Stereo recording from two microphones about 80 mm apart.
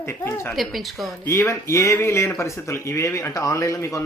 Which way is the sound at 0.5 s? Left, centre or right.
Centre.